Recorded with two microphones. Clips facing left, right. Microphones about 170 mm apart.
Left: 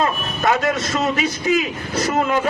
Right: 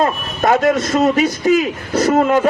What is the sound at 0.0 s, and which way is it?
A man's voice, 40° right (ahead or behind).